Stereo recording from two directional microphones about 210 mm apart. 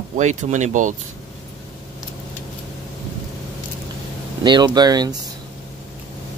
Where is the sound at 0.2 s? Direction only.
35° right (ahead or behind).